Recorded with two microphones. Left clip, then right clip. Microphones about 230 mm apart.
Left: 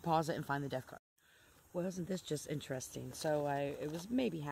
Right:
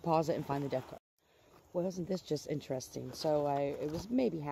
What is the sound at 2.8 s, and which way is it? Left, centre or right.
Speech, left.